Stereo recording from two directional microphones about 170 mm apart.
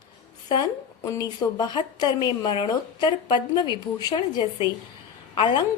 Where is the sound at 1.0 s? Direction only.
20° left (ahead or behind).